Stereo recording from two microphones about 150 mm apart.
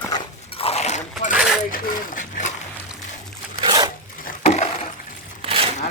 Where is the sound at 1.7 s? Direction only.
65° left (ahead or behind).